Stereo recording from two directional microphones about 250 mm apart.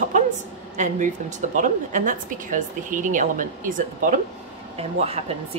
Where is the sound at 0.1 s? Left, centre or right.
Right.